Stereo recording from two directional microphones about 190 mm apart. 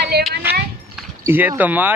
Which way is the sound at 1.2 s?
15° right (ahead or behind).